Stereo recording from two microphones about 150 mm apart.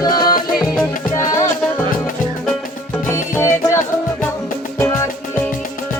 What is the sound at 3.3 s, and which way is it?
Music, 15° left (ahead or behind).